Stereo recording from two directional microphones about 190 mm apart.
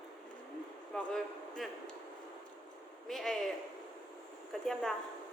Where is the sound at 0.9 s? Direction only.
5° left (ahead or behind).